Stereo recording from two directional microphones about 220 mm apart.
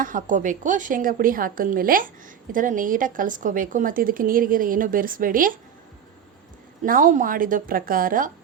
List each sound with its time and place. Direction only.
0.0 s a woman's voice: 35° right (ahead or behind)
6.8 s a woman's voice: 40° right (ahead or behind)